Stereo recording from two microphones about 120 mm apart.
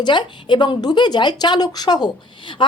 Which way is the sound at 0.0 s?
40° left (ahead or behind).